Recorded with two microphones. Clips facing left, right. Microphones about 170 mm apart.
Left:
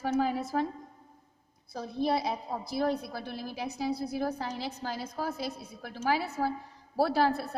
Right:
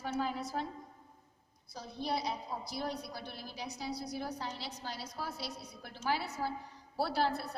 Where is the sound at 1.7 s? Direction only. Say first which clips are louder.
Left 8 dB; 55° left (ahead or behind).